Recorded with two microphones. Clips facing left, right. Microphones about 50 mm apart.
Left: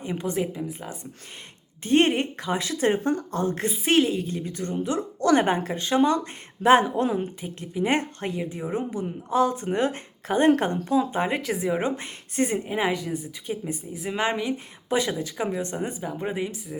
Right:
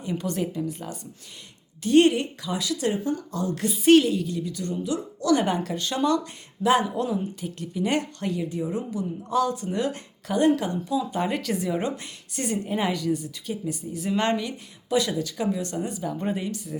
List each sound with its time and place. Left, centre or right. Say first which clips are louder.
0.0 s a woman's voice: left 1 dB; left
1.8 s a woman's voice: right 2 dB; left
7.4 s a woman's voice: left 1 dB; left
11.1 s a woman's voice: left 1 dB; left
14.8 s a woman's voice: right 1 dB; left
16.2 s speech: left 2 dB; centre